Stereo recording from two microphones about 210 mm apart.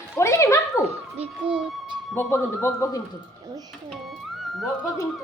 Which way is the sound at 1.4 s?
25° right (ahead or behind).